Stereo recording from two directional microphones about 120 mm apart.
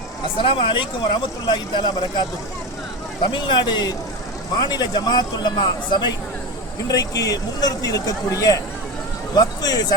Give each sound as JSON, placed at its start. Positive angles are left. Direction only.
{"t": 0.3, "sound": "speech", "side_deg": 45}
{"t": 3.3, "sound": "speech", "side_deg": 40}